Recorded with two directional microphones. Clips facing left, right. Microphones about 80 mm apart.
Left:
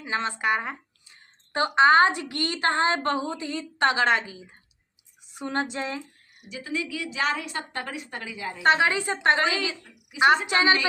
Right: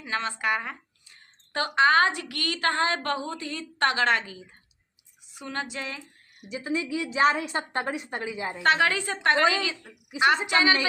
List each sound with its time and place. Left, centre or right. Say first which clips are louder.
0.0 s a woman's voice: left 2 dB; left
5.3 s speech: left 5 dB; left
6.5 s a woman's voice: right 2 dB; right
8.6 s a woman's voice: left 2 dB; left
10.5 s a woman's voice: left 1 dB; left